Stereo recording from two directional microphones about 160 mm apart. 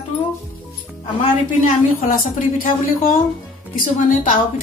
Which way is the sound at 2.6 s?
60° left (ahead or behind).